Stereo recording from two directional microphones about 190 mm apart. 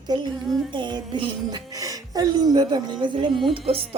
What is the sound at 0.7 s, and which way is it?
Speech, 25° right (ahead or behind).